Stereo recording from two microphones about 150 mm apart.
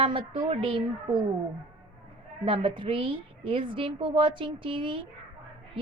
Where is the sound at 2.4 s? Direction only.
35° right (ahead or behind).